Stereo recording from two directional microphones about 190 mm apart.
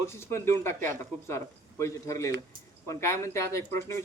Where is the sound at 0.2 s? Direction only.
15° left (ahead or behind).